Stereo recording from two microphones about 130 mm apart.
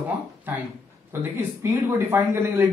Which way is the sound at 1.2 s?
20° right (ahead or behind).